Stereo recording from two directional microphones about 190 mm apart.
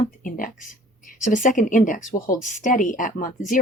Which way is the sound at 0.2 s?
45° left (ahead or behind).